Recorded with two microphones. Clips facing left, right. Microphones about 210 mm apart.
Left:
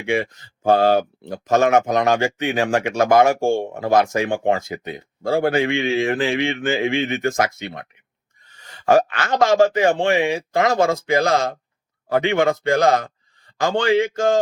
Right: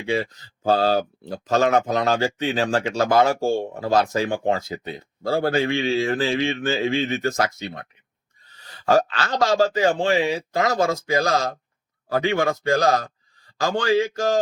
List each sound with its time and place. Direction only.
0.0 s speech: 15° left (ahead or behind)